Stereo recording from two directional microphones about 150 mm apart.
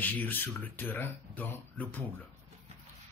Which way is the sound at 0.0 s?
10° left (ahead or behind).